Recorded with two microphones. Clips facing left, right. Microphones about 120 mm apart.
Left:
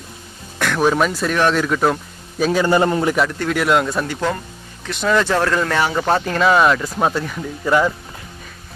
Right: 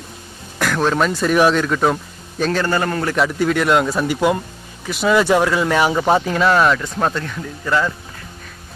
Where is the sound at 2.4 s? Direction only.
10° left (ahead or behind).